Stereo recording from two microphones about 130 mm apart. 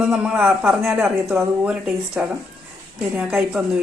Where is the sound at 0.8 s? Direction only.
20° right (ahead or behind).